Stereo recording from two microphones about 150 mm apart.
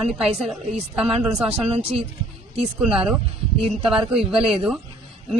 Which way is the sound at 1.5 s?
40° right (ahead or behind).